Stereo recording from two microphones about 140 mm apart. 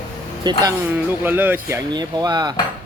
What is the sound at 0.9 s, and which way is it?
Speech, 15° right (ahead or behind).